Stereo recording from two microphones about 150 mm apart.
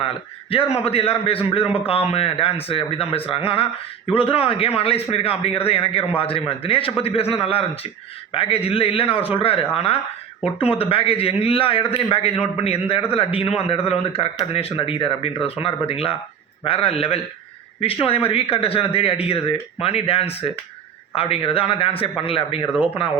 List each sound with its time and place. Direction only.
0.5 s speech: 40° left (ahead or behind)